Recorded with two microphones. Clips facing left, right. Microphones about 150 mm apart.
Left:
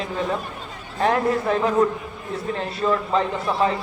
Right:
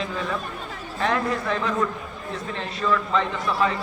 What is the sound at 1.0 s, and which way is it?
Speech, 45° left (ahead or behind).